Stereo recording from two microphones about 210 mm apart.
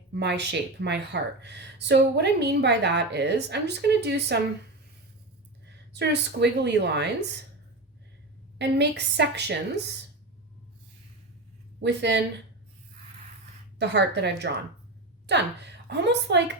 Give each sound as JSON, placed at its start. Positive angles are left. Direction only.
{"t": 0.1, "sound": "speech", "side_deg": -55}
{"t": 5.9, "sound": "speech", "side_deg": -55}
{"t": 8.5, "sound": "a woman's voice", "side_deg": -55}
{"t": 11.8, "sound": "speech", "side_deg": -55}
{"t": 13.7, "sound": "speech", "side_deg": -55}